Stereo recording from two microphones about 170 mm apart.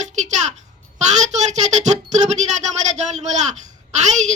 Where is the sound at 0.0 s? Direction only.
45° right (ahead or behind).